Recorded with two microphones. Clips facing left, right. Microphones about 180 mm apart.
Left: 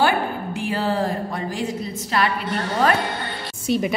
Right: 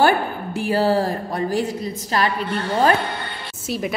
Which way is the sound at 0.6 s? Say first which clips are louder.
Right 5 dB; 40° right (ahead or behind).